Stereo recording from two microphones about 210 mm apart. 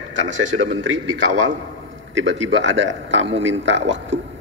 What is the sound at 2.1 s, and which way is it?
A man's voice, 65° right (ahead or behind).